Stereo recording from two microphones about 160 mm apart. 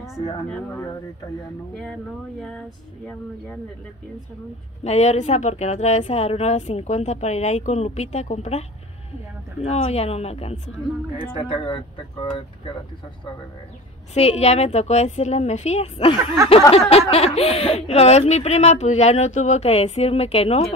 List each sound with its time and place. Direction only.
0.0 s speech: centre (ahead or behind)
4.8 s a woman's voice: 45° left (ahead or behind)
14.1 s a woman's voice: 40° left (ahead or behind)
17.4 s speech: 40° left (ahead or behind)